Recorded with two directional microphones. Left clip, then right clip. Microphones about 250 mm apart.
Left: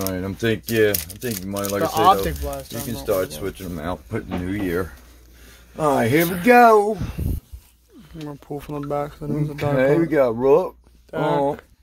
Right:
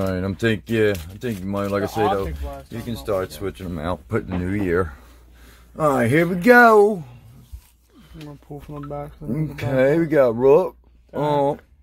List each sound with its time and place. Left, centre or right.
0.0 s speech: right
3.1 s speech: right
5.8 s speech: right
6.1 s speech: right
8.3 s speech: left
9.8 s speech: right